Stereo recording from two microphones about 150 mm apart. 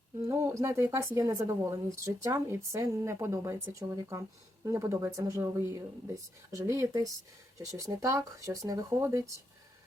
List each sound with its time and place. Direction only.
0.3 s speech: 20° right (ahead or behind)